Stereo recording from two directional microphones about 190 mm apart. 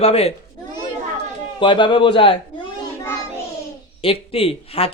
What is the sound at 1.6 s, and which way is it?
Speech, 25° left (ahead or behind).